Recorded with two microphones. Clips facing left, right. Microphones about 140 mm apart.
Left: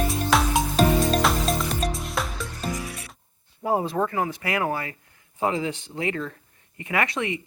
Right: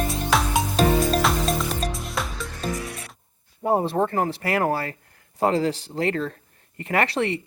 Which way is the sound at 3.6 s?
25° right (ahead or behind).